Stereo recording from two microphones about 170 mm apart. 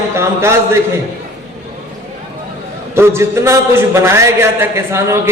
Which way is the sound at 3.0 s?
15° right (ahead or behind).